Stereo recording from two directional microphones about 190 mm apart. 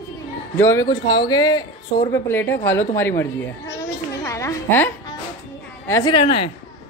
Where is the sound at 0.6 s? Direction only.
15° left (ahead or behind).